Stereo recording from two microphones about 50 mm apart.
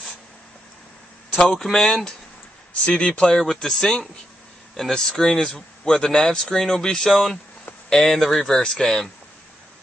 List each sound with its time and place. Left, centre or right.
1.4 s speech: centre